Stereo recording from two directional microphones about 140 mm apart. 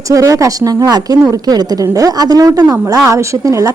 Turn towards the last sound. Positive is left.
turn(degrees=-20)  # may be behind; listen again after turning